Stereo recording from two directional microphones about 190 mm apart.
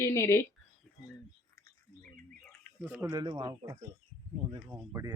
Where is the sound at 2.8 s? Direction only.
10° right (ahead or behind).